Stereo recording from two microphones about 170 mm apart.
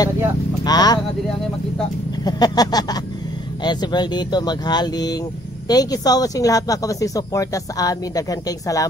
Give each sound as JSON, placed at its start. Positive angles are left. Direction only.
{"t": 0.7, "sound": "speech", "side_deg": 25}
{"t": 2.2, "sound": "speech", "side_deg": 25}